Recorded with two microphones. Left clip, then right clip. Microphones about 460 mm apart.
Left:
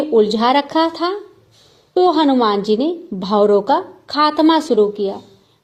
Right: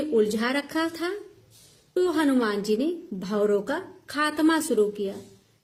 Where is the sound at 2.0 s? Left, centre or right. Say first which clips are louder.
Left 11 dB; right.